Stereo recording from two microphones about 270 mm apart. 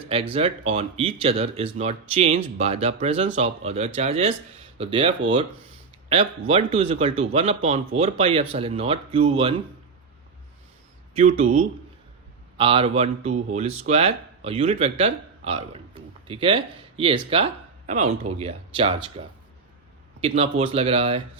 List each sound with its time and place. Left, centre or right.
0.1 s speech: right
12.5 s speech: centre
20.2 s speech: right